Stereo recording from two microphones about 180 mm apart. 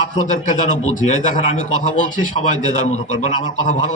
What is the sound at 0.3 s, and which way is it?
A man's voice, 45° left (ahead or behind).